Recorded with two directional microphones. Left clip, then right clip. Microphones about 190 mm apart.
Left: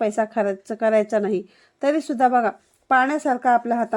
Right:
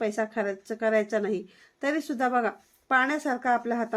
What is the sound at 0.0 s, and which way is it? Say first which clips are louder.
A woman's voice: left 7 dB; 45° left (ahead or behind).